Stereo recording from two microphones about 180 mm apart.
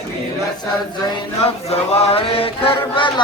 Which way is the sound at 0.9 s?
25° left (ahead or behind).